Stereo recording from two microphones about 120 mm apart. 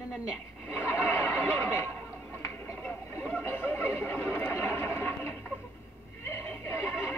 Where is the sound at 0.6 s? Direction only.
15° left (ahead or behind).